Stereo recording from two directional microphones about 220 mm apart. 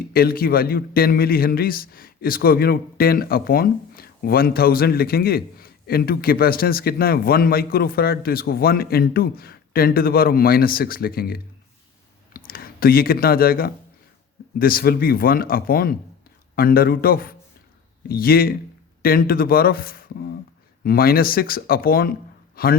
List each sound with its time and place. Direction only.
0.1 s a man's voice: 40° left (ahead or behind)